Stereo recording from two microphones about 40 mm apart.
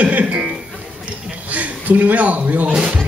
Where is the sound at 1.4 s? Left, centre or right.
Right.